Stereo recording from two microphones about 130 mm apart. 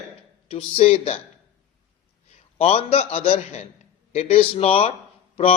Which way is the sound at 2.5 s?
50° left (ahead or behind).